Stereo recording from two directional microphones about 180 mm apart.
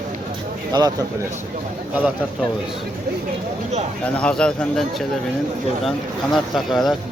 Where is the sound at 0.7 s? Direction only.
20° right (ahead or behind).